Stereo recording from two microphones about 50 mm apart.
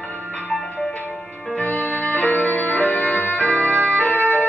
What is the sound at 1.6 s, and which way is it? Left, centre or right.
Music, left.